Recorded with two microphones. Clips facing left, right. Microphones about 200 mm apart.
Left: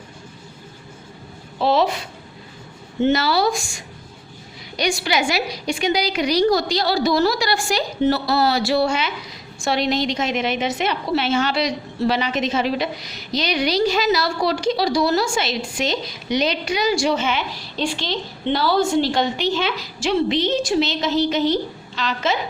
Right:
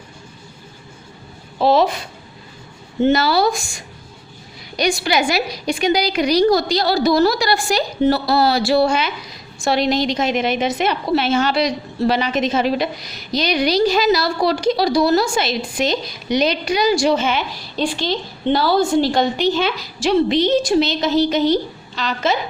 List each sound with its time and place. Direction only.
1.5 s a woman's voice: 45° right (ahead or behind)
3.0 s speech: 45° right (ahead or behind)
4.8 s a woman's voice: 45° right (ahead or behind)